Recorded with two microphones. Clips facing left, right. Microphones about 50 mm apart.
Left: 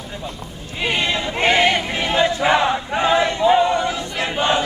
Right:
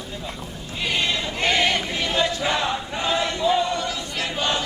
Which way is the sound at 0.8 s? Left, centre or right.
Left.